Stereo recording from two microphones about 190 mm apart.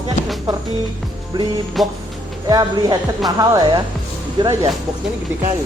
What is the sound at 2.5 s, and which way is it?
Speech, 20° right (ahead or behind).